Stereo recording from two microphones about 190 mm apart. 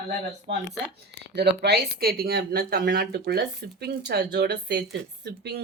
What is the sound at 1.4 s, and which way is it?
Speech, 60° right (ahead or behind).